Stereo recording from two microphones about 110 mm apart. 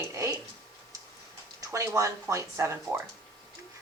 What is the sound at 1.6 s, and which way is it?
A woman's voice, 25° right (ahead or behind).